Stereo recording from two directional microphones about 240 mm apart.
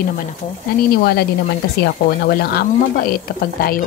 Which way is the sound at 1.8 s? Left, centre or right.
Left.